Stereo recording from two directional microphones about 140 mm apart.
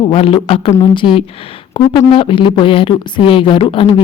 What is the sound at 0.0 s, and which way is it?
Speech, 40° left (ahead or behind).